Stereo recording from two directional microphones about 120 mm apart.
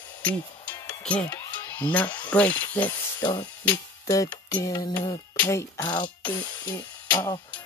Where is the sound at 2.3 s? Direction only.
15° left (ahead or behind).